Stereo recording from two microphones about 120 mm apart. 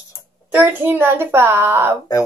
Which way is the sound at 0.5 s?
15° right (ahead or behind).